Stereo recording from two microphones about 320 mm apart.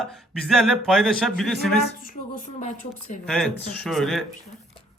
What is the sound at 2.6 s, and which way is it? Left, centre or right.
Speech, left.